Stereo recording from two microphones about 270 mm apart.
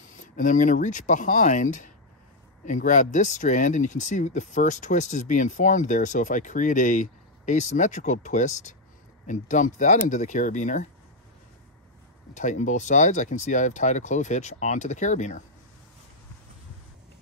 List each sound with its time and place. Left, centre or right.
0.2 s speech: left
12.4 s speech: left